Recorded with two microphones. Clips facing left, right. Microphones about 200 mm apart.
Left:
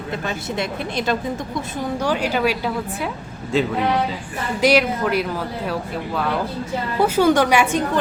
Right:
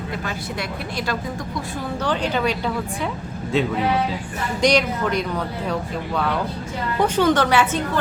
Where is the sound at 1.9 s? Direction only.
10° left (ahead or behind).